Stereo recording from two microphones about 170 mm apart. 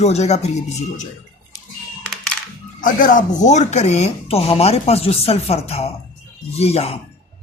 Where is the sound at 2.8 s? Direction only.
50° left (ahead or behind).